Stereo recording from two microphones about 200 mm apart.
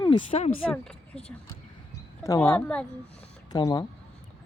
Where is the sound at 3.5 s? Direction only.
20° left (ahead or behind).